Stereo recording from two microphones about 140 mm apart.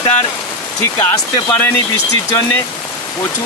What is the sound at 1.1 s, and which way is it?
Speech, 25° left (ahead or behind).